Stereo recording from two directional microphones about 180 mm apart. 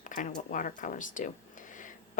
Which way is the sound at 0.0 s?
45° left (ahead or behind).